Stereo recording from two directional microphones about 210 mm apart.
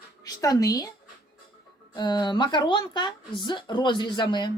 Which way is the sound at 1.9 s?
20° left (ahead or behind).